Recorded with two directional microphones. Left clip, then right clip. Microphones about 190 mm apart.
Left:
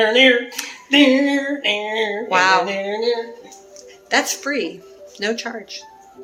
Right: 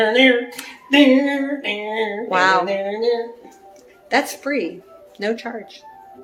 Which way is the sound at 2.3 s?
15° right (ahead or behind).